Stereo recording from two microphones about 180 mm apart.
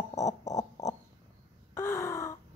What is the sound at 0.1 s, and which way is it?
Owl, 20° left (ahead or behind).